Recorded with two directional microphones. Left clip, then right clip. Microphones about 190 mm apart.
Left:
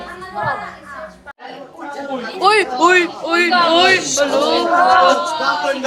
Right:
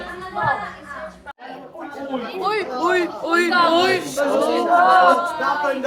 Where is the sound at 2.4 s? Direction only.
20° left (ahead or behind).